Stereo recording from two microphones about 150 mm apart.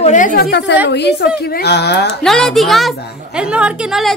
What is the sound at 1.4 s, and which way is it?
Speech, 90° left.